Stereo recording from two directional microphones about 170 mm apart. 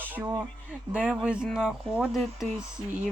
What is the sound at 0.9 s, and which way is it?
Speech, 5° right (ahead or behind).